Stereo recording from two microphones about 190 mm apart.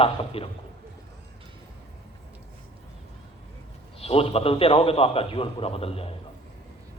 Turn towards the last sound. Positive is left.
turn(degrees=30)  # may be behind; listen again after turning